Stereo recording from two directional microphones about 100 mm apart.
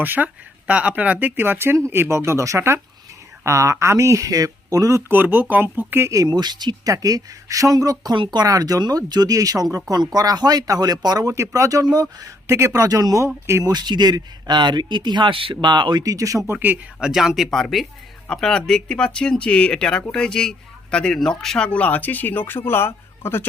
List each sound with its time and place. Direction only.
0.0 s speech: 20° right (ahead or behind)
6.2 s speech: 45° right (ahead or behind)
8.1 s speech: 50° right (ahead or behind); by 13.7 s 30° right (ahead or behind)
13.7 s speech: 45° right (ahead or behind); by 15.7 s 65° right (ahead or behind)
15.7 s speech: 45° right (ahead or behind)
16.5 s speech: 20° right (ahead or behind)
17.0 s speech: 5° right (ahead or behind); by 23.5 s 25° left (ahead or behind)